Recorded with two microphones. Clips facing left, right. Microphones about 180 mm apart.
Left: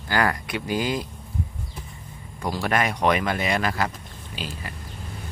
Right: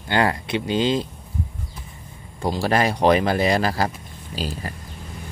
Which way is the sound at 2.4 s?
30° right (ahead or behind).